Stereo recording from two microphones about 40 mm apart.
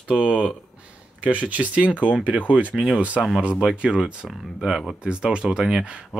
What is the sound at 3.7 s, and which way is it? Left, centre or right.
Speech, right.